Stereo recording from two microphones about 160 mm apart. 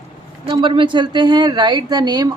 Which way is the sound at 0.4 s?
30° right (ahead or behind).